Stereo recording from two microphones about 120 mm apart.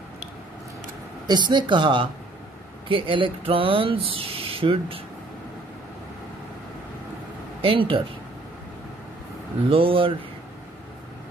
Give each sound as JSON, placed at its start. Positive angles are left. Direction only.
{"t": 1.2, "sound": "speech", "side_deg": -35}
{"t": 7.6, "sound": "speech", "side_deg": -45}
{"t": 9.7, "sound": "speech", "side_deg": -50}